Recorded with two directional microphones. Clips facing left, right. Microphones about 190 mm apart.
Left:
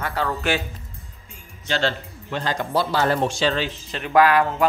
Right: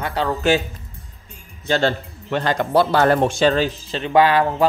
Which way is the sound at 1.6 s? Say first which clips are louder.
Right 5 dB; 45° right (ahead or behind).